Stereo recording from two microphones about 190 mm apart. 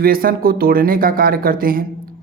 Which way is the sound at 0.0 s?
50° right (ahead or behind).